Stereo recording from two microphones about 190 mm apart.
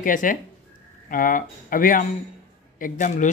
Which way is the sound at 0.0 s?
45° left (ahead or behind).